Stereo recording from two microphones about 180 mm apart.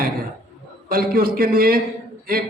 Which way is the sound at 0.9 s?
55° right (ahead or behind).